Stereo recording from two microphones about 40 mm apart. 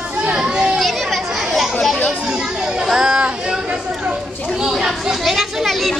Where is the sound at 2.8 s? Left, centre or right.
Centre.